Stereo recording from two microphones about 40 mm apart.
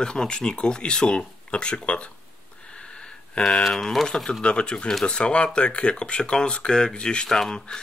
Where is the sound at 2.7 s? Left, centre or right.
Left.